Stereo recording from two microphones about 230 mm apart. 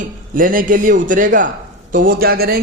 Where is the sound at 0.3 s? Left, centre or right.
Right.